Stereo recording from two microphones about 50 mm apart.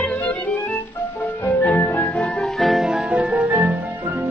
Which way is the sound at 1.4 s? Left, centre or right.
Left.